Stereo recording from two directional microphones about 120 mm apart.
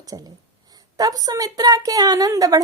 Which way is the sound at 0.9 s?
30° right (ahead or behind).